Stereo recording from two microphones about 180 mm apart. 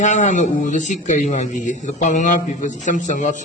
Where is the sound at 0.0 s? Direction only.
40° left (ahead or behind).